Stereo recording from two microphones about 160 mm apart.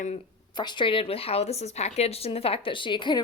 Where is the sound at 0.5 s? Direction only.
30° left (ahead or behind).